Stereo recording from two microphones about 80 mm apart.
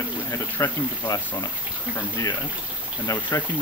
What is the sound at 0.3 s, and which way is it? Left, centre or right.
Speech, left.